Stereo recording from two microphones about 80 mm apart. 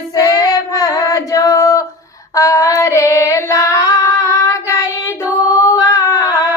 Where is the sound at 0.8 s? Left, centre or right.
Left.